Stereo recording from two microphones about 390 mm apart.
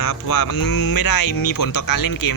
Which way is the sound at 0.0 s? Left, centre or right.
Left.